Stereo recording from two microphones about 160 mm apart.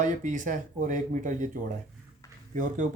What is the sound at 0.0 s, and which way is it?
Speech, 50° right (ahead or behind).